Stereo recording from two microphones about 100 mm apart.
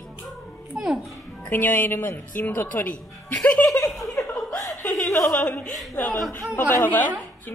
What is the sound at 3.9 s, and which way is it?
Chuckle, centre (ahead or behind).